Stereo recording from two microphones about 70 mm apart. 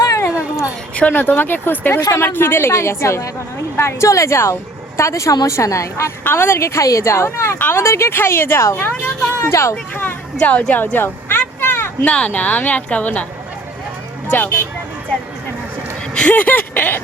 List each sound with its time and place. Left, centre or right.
0.2 s a sound: left
0.9 s a woman's voice: left
6.2 s a woman's voice: left
8.8 s a woman's voice: left
9.4 s a woman's voice: left
9.9 s a woman's voice: left
10.9 s a sound: left
12.0 s a woman's voice: centre
14.3 s a woman's voice: left
16.1 s a woman's voice: left